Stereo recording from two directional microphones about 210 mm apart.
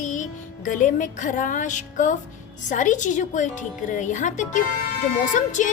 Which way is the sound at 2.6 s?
35° left (ahead or behind).